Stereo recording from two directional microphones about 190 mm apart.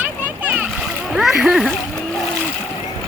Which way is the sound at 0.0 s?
10° right (ahead or behind).